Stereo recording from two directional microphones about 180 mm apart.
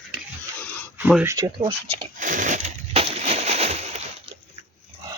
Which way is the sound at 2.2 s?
45° right (ahead or behind).